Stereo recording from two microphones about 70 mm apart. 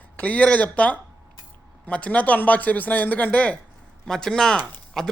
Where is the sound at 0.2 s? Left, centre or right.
Left.